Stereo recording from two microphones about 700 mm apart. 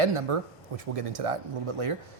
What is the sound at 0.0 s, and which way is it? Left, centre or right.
Speech, right.